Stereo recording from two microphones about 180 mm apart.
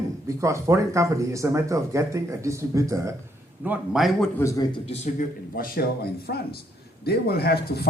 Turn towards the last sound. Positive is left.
turn(degrees=60)  # may be behind; listen again after turning